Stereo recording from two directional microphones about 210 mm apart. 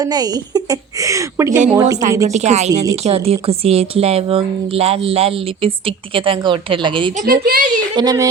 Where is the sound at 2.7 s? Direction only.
15° right (ahead or behind).